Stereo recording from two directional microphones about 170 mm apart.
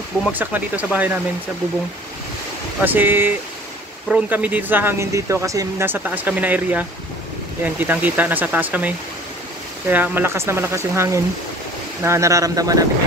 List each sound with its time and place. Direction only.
0.3 s speech: 10° right (ahead or behind)
2.8 s speech: 10° right (ahead or behind)